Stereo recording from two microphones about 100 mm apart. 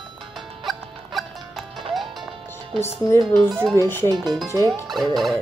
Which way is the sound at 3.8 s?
20° left (ahead or behind).